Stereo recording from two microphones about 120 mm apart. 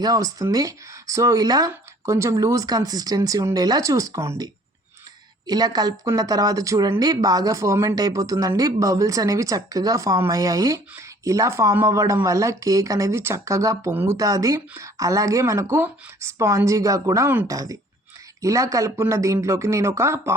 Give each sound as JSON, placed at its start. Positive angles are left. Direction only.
{"t": 0.0, "sound": "speech", "side_deg": -30}
{"t": 5.5, "sound": "speech", "side_deg": -35}
{"t": 14.2, "sound": "speech", "side_deg": -30}